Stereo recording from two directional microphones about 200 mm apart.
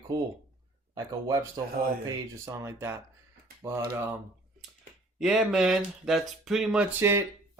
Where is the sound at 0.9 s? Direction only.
15° right (ahead or behind).